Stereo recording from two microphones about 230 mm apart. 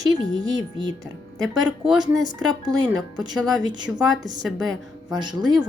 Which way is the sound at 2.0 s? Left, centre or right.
Centre.